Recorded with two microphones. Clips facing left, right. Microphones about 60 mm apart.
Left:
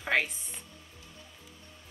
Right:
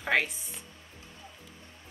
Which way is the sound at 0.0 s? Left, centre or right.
Centre.